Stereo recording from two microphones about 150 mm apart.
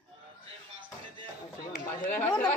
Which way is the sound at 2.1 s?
15° left (ahead or behind).